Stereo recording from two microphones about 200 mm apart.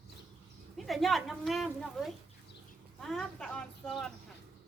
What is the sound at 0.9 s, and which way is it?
A woman's voice, centre (ahead or behind).